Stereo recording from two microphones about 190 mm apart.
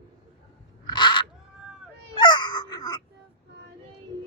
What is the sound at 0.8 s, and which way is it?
Crow, 25° left (ahead or behind).